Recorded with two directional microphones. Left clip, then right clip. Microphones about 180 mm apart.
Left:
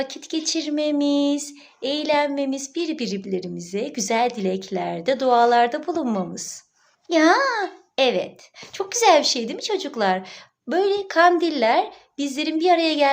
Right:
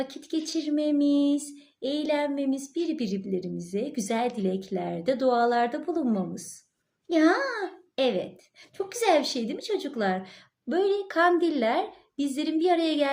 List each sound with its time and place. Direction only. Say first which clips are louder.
0.0 s speech: left 5 dB; 20° right (ahead or behind)